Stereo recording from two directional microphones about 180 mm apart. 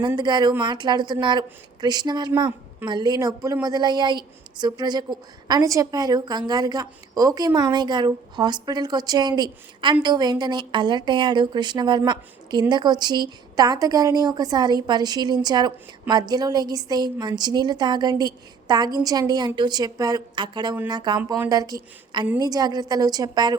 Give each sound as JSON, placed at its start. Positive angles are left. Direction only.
{"t": 0.2, "sound": "a woman's voice", "side_deg": -25}